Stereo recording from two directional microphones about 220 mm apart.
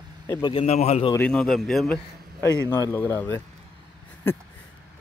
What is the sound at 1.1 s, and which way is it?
A man's voice, 5° left (ahead or behind).